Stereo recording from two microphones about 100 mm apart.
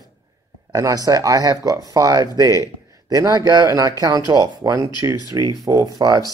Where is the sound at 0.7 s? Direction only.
35° right (ahead or behind).